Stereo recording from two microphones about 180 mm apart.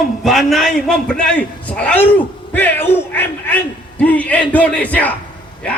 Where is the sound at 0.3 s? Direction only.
Centre (ahead or behind).